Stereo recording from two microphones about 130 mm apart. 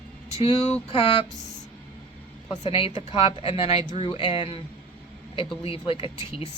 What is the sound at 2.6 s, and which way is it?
A woman's voice, 45° left (ahead or behind).